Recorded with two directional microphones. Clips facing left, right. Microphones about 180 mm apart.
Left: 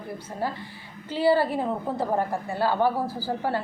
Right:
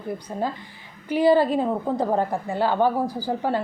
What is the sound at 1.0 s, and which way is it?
A woman's voice, 15° right (ahead or behind).